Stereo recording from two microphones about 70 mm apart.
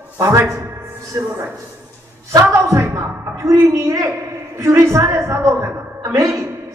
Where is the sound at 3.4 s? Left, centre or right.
Right.